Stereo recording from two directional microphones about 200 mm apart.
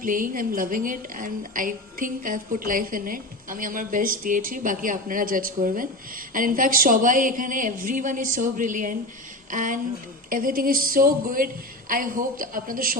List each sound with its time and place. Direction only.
0.0 s a woman's voice: 45° right (ahead or behind)